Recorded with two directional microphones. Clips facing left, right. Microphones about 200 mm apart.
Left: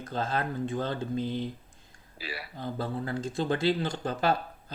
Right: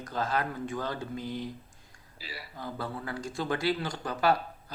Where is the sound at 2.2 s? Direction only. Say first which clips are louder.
Left 5 dB; 65° left (ahead or behind).